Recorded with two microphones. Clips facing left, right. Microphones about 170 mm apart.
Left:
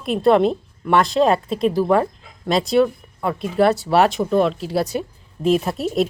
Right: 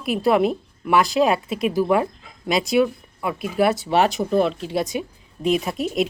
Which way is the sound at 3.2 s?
5° right (ahead or behind).